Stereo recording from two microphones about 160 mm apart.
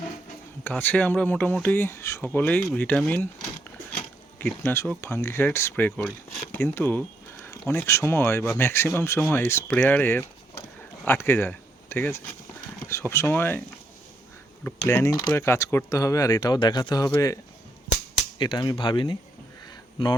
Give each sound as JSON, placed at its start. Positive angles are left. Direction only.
{"t": 0.6, "sound": "speech", "side_deg": 10}
{"t": 3.9, "sound": "a sound", "side_deg": 10}
{"t": 4.9, "sound": "speech", "side_deg": 15}
{"t": 14.6, "sound": "speech", "side_deg": 15}